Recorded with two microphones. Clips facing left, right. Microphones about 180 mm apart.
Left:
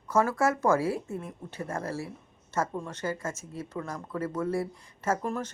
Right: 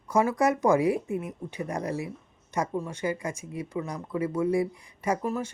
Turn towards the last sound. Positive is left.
turn(degrees=-10)  # may be behind; listen again after turning